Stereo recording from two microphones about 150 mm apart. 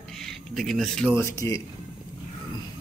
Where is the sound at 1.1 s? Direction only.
20° left (ahead or behind).